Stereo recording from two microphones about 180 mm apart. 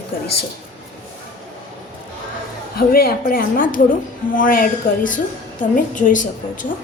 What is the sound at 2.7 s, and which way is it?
A woman's voice, 55° left (ahead or behind).